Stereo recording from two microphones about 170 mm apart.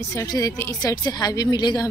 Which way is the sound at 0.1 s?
20° left (ahead or behind).